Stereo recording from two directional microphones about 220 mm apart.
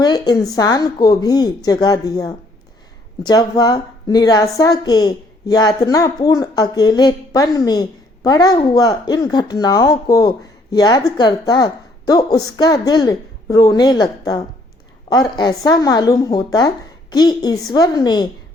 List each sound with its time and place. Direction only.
0.0 s a woman's voice: 20° left (ahead or behind)